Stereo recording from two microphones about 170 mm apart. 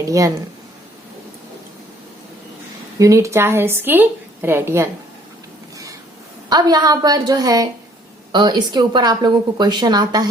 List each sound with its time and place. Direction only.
0.1 s a woman's voice: 20° right (ahead or behind)
3.0 s a woman's voice: 20° right (ahead or behind)
6.5 s a woman's voice: 25° right (ahead or behind)